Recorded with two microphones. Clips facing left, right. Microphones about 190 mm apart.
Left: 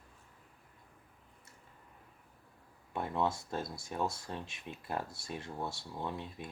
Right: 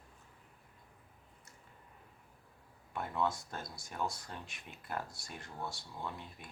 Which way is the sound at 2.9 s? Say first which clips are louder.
Left 2 dB; 25° left (ahead or behind).